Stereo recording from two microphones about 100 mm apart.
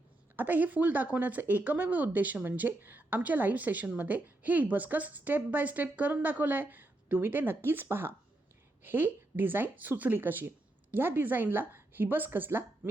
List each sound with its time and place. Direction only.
0.3 s a woman's voice: 20° right (ahead or behind)